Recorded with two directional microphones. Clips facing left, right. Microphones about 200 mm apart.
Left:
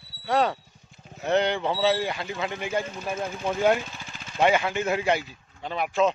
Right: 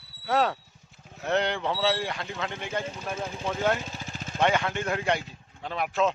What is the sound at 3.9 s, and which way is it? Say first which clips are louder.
Vehicle: right 4 dB; 40° right (ahead or behind).